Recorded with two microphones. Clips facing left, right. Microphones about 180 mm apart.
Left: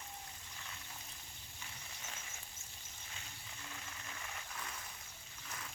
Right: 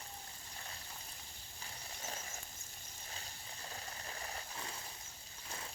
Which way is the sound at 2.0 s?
40° right (ahead or behind).